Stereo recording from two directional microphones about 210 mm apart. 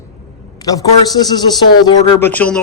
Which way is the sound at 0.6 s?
20° left (ahead or behind).